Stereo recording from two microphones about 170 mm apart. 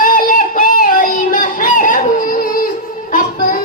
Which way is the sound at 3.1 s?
55° left (ahead or behind).